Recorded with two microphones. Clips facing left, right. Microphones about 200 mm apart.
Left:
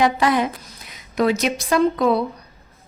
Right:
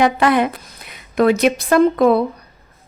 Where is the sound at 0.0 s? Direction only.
60° right (ahead or behind).